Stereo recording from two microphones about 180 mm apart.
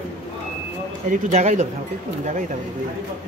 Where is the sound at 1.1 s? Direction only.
45° right (ahead or behind).